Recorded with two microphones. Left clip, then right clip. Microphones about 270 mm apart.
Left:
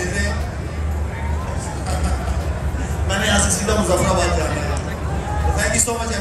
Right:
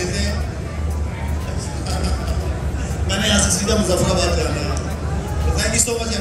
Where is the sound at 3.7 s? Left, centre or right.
Centre.